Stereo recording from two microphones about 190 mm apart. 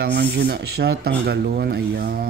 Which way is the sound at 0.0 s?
55° right (ahead or behind).